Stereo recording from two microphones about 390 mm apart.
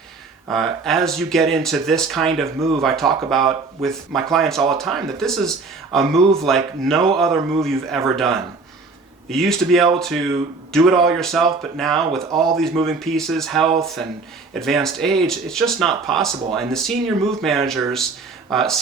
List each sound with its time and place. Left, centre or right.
0.4 s speech: centre